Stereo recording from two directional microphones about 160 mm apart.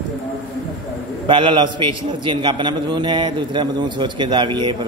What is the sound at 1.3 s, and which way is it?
A man's voice, 30° right (ahead or behind).